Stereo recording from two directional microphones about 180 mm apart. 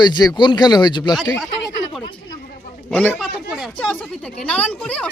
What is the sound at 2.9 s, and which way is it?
Speech, 10° left (ahead or behind).